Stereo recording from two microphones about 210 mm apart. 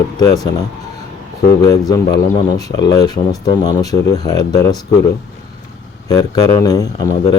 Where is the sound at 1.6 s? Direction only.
15° left (ahead or behind).